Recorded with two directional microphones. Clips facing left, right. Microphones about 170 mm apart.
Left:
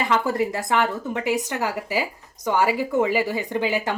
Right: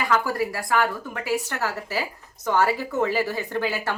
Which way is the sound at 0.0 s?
25° left (ahead or behind).